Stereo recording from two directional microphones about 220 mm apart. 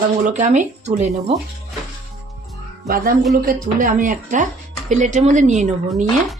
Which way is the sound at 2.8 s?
45° right (ahead or behind).